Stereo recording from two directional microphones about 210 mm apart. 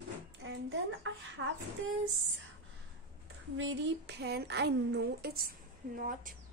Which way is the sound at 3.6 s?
60° right (ahead or behind).